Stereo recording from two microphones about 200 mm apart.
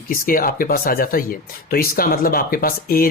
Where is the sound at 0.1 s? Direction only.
45° left (ahead or behind).